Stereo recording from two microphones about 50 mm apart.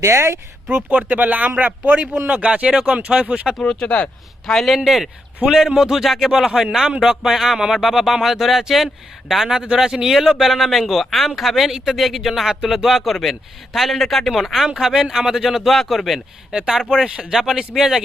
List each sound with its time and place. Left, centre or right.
0.0 s speech: right
0.9 s speech: right
3.7 s speech: left
4.4 s speech: centre
4.8 s speech: centre